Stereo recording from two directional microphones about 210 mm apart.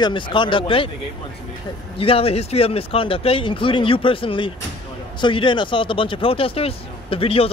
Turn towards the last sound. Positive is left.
turn(degrees=25)  # may be behind; listen again after turning